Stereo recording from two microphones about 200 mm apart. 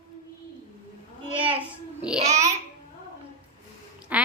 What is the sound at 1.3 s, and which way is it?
Speech, 5° right (ahead or behind).